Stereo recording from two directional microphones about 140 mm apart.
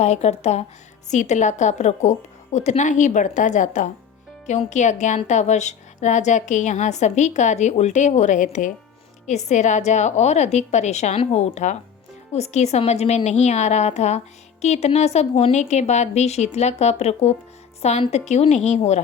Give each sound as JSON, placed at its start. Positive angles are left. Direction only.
{"t": 0.0, "sound": "a woman's voice", "side_deg": 50}